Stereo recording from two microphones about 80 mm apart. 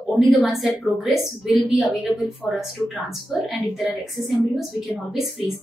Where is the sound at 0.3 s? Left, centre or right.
Centre.